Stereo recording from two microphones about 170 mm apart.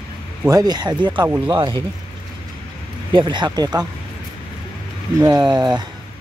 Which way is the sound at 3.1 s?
25° right (ahead or behind).